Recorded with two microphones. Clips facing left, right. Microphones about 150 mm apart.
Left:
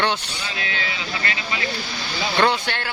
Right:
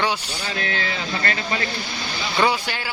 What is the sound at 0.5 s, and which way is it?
Speech, 45° right (ahead or behind).